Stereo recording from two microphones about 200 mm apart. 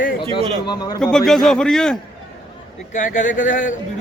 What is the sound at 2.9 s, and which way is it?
Speech, 40° left (ahead or behind).